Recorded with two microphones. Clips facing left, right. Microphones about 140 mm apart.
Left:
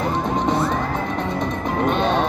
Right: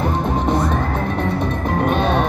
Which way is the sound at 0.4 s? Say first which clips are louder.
Right 1 dB; 5° right (ahead or behind).